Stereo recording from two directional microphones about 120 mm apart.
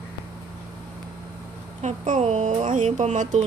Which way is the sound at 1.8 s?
75° right (ahead or behind).